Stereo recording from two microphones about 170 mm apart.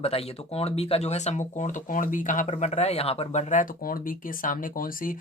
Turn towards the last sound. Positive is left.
turn(degrees=55)  # may be behind; listen again after turning